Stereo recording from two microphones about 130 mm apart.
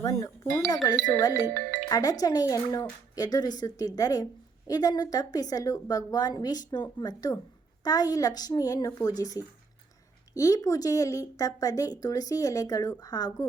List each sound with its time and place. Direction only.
0.0 s speech: 25° left (ahead or behind)